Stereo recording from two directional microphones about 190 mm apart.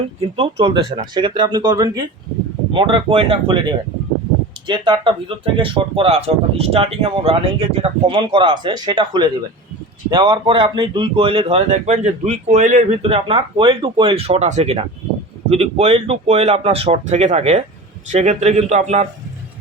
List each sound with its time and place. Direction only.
0.2 s speech: 30° right (ahead or behind)
4.6 s speech: 25° right (ahead or behind)